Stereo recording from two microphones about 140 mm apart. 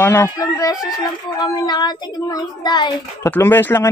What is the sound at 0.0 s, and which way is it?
Speech, 20° left (ahead or behind).